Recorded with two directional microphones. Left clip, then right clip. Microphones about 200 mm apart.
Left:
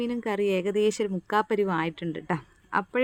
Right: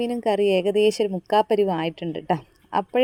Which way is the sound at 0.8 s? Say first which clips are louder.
Right 5 dB; 35° left (ahead or behind).